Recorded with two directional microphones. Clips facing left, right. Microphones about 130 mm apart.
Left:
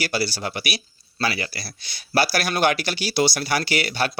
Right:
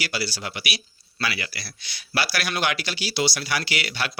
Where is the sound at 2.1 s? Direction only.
45° left (ahead or behind).